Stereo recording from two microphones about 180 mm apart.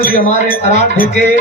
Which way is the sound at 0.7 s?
45° left (ahead or behind).